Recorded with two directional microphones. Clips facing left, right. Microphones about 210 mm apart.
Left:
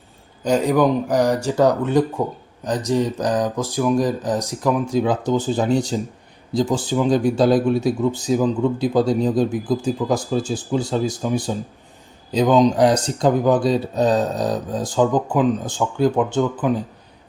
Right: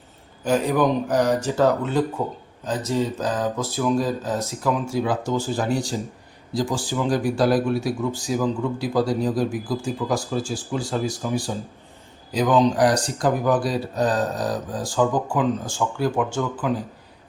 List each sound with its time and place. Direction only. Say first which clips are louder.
0.4 s speech: left 3 dB; 15° left (ahead or behind)